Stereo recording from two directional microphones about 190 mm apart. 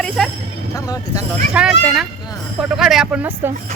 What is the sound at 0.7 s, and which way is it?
Speech, 20° left (ahead or behind).